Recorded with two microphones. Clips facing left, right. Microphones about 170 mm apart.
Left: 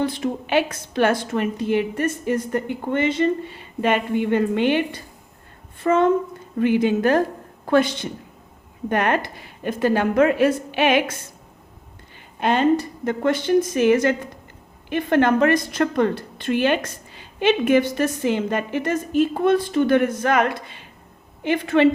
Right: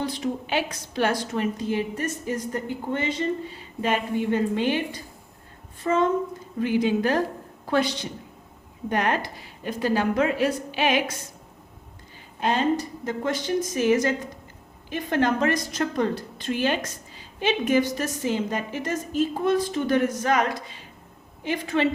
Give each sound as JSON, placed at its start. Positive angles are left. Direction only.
{"t": 0.0, "sound": "a woman's voice", "side_deg": 55}
{"t": 12.4, "sound": "a woman's voice", "side_deg": 65}